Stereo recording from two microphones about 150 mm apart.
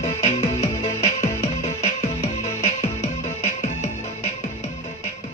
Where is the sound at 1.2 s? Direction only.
50° left (ahead or behind).